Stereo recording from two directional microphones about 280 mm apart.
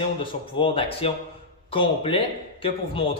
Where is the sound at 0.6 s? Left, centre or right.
Centre.